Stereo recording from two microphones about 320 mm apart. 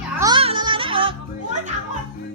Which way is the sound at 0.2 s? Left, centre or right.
Centre.